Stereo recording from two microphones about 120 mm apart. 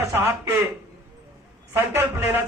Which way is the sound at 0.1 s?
20° right (ahead or behind).